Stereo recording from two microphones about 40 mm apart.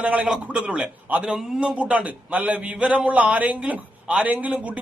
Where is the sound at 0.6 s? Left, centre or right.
Right.